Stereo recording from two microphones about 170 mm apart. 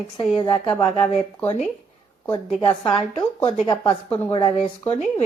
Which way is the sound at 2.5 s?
25° left (ahead or behind).